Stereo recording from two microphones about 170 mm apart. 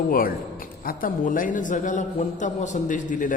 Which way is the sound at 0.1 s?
55° left (ahead or behind).